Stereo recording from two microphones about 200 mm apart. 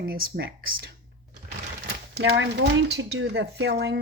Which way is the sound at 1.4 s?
55° right (ahead or behind).